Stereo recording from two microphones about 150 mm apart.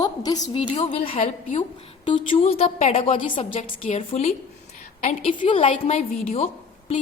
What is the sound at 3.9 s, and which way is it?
A woman's voice, 50° left (ahead or behind).